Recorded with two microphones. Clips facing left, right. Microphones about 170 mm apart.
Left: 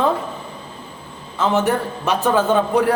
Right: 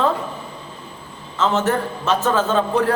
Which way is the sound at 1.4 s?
15° left (ahead or behind).